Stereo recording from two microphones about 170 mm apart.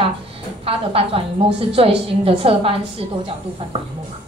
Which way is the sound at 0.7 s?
35° right (ahead or behind).